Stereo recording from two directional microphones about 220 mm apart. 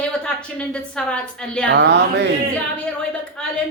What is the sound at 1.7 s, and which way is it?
Speech, 50° right (ahead or behind).